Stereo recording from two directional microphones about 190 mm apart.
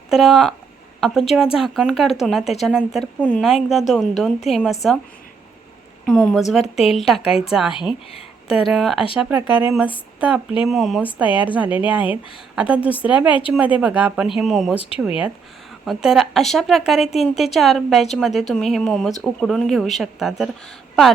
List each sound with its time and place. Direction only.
0.1 s a woman's voice: centre (ahead or behind)
1.5 s a woman's voice: centre (ahead or behind)
6.1 s a woman's voice: centre (ahead or behind)
14.8 s speech: 30° left (ahead or behind)
15.0 s a woman's voice: 5° right (ahead or behind)